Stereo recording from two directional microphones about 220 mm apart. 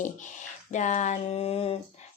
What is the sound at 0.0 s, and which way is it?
A woman's voice, 35° left (ahead or behind).